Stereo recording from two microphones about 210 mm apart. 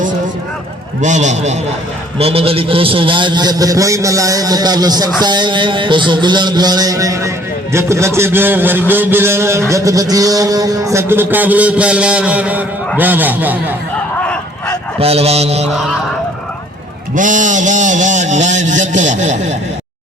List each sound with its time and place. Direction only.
1.0 s a man's voice: 35° right (ahead or behind); by 13.7 s 10° right (ahead or behind)
14.2 s a sound: 5° left (ahead or behind)
14.9 s speech: 30° right (ahead or behind)
17.2 s speech: 40° right (ahead or behind)